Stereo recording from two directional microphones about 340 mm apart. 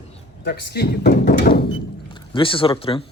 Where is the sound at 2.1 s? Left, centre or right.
Centre.